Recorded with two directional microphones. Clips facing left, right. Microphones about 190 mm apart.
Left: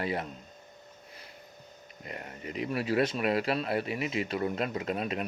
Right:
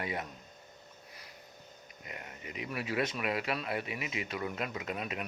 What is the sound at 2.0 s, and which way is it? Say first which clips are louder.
Speech: left 6 dB; 40° left (ahead or behind).